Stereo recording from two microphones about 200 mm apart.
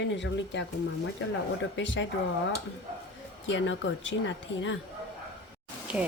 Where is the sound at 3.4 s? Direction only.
70° left (ahead or behind).